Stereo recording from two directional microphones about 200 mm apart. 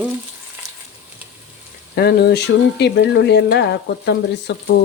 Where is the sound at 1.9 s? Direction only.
50° left (ahead or behind).